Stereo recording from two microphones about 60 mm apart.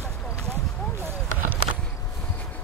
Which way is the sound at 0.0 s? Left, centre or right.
Right.